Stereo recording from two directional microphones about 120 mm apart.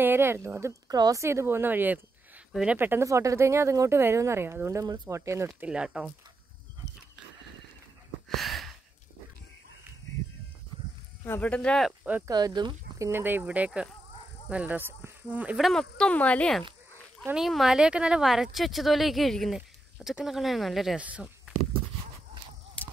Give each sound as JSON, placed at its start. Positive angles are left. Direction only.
{"t": 0.0, "sound": "a woman's voice", "side_deg": -20}
{"t": 5.7, "sound": "speech", "side_deg": -5}
{"t": 8.3, "sound": "sigh", "side_deg": 0}
{"t": 11.2, "sound": "speech", "side_deg": 15}
{"t": 12.3, "sound": "speech", "side_deg": -35}
{"t": 13.1, "sound": "speech", "side_deg": -15}
{"t": 15.5, "sound": "speech", "side_deg": 0}
{"t": 22.8, "sound": "a sound", "side_deg": 10}